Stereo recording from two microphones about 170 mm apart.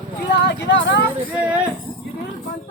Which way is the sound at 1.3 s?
10° right (ahead or behind).